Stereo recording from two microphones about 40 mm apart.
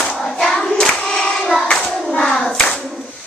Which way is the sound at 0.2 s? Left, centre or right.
Centre.